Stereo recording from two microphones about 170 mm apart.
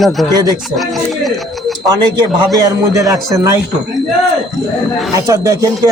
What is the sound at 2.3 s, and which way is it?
A man's voice, 20° right (ahead or behind).